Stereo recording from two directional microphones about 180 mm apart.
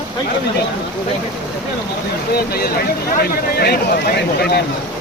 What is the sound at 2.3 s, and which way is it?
Speech, 60° left (ahead or behind).